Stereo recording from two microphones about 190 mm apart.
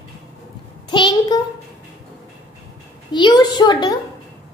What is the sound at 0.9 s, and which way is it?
Speech, 25° left (ahead or behind).